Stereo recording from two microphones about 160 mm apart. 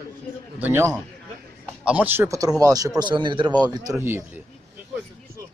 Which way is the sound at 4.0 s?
15° right (ahead or behind).